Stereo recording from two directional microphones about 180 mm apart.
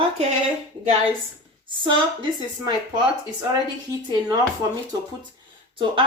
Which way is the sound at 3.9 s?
20° right (ahead or behind).